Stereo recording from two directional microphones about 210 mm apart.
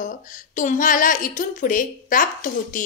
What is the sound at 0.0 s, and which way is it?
A woman's voice, 40° left (ahead or behind).